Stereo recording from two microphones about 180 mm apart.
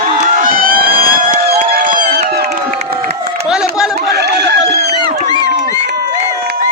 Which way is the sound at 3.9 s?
65° right (ahead or behind).